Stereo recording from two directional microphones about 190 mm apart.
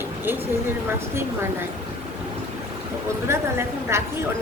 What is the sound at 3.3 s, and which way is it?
Speech, 15° right (ahead or behind).